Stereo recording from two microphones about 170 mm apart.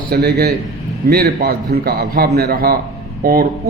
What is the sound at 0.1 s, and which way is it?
A man's voice, 70° right (ahead or behind).